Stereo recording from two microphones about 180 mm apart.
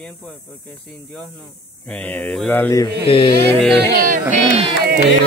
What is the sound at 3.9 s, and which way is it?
Music, 50° right (ahead or behind).